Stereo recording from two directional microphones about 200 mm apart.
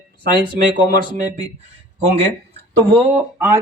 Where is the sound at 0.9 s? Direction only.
45° right (ahead or behind).